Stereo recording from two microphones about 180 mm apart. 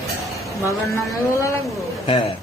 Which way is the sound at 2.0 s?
30° left (ahead or behind).